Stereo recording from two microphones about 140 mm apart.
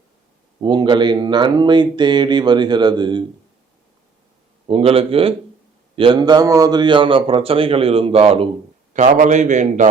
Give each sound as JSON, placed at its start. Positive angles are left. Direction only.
{"t": 0.6, "sound": "speech", "side_deg": -35}
{"t": 4.7, "sound": "speech", "side_deg": -40}
{"t": 8.9, "sound": "a man's voice", "side_deg": -65}